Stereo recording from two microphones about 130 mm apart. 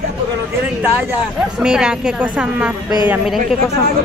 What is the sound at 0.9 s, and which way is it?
Speech, 10° right (ahead or behind).